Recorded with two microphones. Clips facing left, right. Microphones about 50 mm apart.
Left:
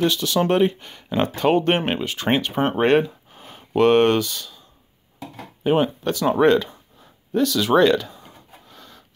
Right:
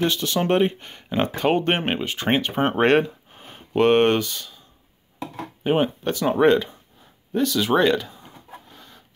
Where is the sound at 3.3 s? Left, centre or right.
Right.